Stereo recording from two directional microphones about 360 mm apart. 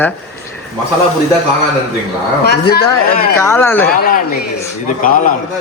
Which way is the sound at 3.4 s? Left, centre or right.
Centre.